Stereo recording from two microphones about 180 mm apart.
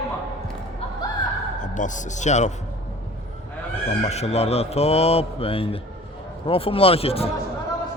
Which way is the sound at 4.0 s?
35° left (ahead or behind).